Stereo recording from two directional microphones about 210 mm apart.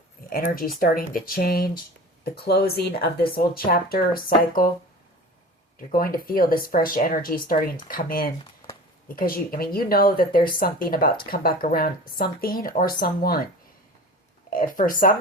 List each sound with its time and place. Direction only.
0.3 s speech: 45° left (ahead or behind)
5.9 s speech: 45° left (ahead or behind)
14.5 s speech: 40° left (ahead or behind)